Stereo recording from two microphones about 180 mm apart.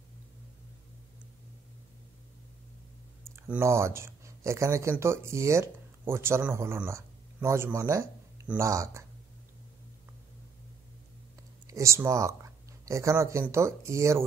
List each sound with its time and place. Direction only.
3.3 s speech: 15° right (ahead or behind)
11.6 s speech: 15° right (ahead or behind)